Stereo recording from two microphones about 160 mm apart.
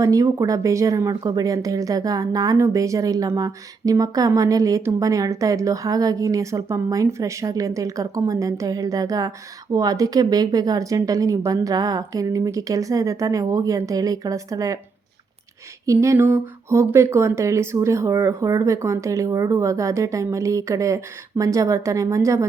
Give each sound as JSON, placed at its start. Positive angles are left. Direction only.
{"t": 0.0, "sound": "speech", "side_deg": -20}
{"t": 15.9, "sound": "speech", "side_deg": -20}